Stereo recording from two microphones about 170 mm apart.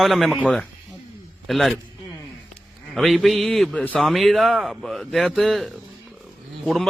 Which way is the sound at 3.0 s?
Centre (ahead or behind).